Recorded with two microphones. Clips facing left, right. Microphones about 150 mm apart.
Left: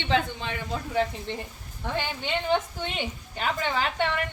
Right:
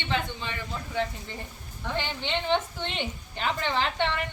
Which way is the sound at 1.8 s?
10° left (ahead or behind).